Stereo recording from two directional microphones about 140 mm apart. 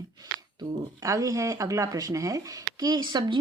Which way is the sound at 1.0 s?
25° right (ahead or behind).